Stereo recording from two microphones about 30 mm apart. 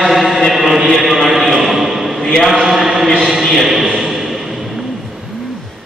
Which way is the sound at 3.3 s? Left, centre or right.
Centre.